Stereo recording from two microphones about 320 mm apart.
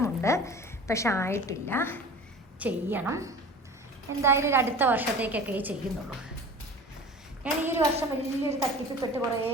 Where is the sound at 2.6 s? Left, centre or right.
Centre.